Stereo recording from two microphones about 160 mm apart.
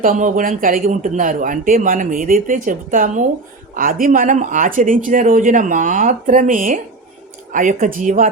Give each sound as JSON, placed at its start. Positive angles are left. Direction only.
{"t": 0.0, "sound": "speech", "side_deg": -55}